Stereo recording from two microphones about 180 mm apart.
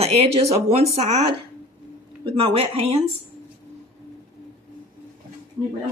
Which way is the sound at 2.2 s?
30° right (ahead or behind).